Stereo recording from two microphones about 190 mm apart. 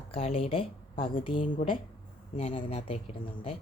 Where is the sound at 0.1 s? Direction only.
30° left (ahead or behind).